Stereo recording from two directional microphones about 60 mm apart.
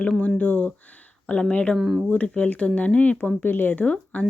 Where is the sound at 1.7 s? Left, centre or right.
Centre.